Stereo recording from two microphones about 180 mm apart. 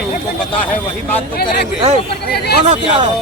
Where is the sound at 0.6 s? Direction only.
10° left (ahead or behind).